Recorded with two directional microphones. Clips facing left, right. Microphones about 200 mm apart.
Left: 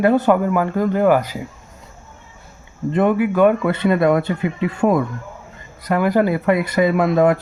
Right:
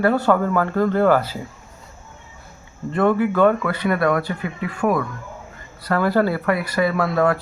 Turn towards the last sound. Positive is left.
turn(degrees=20)  # may be behind; listen again after turning